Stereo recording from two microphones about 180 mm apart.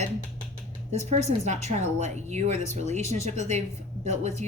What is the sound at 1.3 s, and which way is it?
A woman's voice, 40° right (ahead or behind).